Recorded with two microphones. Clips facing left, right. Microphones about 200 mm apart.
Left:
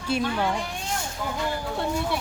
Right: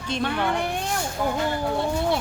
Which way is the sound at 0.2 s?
60° right (ahead or behind).